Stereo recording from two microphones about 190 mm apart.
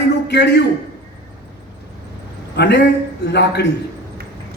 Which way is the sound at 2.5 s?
65° left (ahead or behind).